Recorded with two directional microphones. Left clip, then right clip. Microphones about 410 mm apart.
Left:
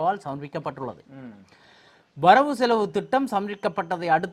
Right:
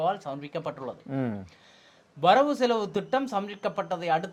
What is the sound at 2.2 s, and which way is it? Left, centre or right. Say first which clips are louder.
Speech: left 4 dB; left.